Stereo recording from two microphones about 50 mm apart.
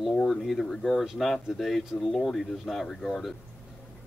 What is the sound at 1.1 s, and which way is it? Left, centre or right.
Speech, centre.